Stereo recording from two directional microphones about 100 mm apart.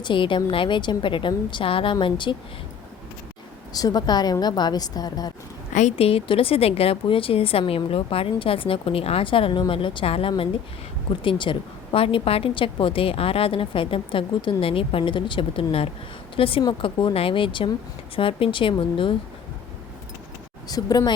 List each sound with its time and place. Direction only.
0.0 s a woman's voice: 55° left (ahead or behind)
3.7 s speech: 40° left (ahead or behind)
6.0 s a woman's voice: 80° left; by 19.1 s 60° left (ahead or behind)
20.7 s speech: 40° left (ahead or behind)